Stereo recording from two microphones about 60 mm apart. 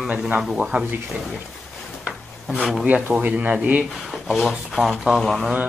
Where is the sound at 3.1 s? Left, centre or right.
Right.